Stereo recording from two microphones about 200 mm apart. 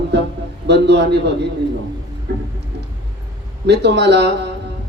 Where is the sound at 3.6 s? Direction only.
60° right (ahead or behind).